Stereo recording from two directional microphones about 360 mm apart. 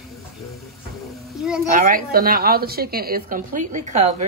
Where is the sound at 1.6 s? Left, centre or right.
Right.